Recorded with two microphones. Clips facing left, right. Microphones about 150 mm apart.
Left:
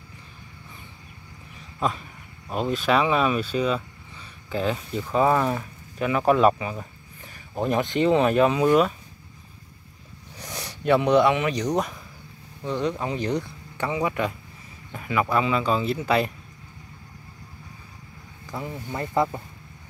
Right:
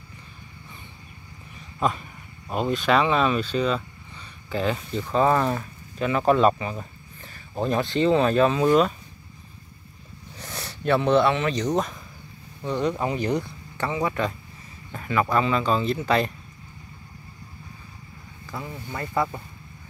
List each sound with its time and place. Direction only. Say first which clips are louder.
1.8 s speech: right 1 dB; centre (ahead or behind)
10.3 s speech: even; 15° left (ahead or behind)
12.6 s speech: right 1 dB; centre (ahead or behind)
13.7 s speech: even; 15° left (ahead or behind)
18.5 s speech: left 2 dB; 20° left (ahead or behind)